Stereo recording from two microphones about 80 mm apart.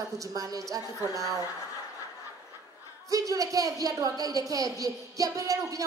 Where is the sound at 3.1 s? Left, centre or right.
Right.